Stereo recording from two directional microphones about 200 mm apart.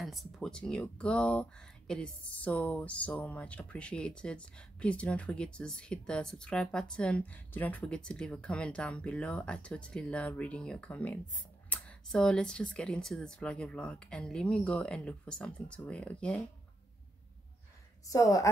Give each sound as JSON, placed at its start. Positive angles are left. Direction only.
{"t": 0.0, "sound": "speech", "side_deg": 0}
{"t": 18.0, "sound": "a woman's voice", "side_deg": 15}